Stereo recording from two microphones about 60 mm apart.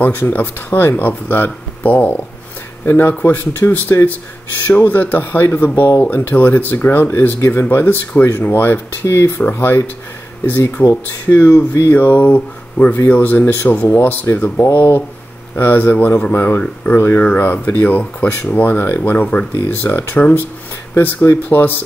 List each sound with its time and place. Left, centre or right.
0.0 s speech: left
7.3 s speech: left
7.7 s speech: left
9.0 s speech: left
11.5 s speech: left
11.9 s speech: left